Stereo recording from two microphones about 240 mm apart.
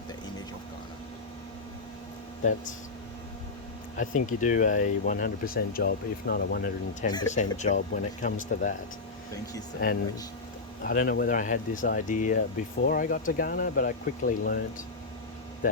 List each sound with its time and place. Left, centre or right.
3.9 s speech: left
7.1 s speech: centre
7.3 s speech: left
10.8 s speech: left